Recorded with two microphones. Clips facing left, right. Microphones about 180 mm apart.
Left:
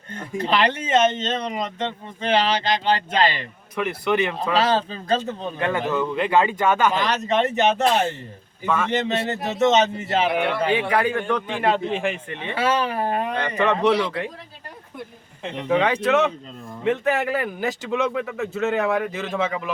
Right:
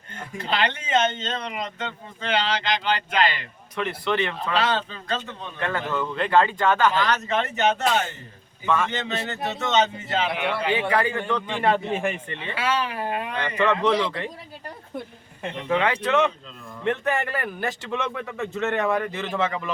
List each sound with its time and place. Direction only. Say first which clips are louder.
0.2 s a man's voice: left 5 dB; 40° left (ahead or behind)
1.1 s speech: left 5 dB; 30° left (ahead or behind)
3.8 s speech: left 3 dB; 10° left (ahead or behind)
4.6 s a man's voice: left 4 dB; 40° left (ahead or behind)
5.5 s speech: left 3 dB; 15° left (ahead or behind)
7.1 s a man's voice: left 3 dB; 35° left (ahead or behind)
8.6 s speech: even; centre (ahead or behind)
8.9 s a man's voice: left 6 dB; 35° left (ahead or behind)
10.7 s speech: left 2 dB; 15° left (ahead or behind)
12.3 s speech: left 3 dB; 15° left (ahead or behind)
12.6 s a man's voice: left 4 dB; 40° left (ahead or behind)
13.8 s speech: left 2 dB; 10° left (ahead or behind)
15.8 s speech: left 2 dB; 10° left (ahead or behind)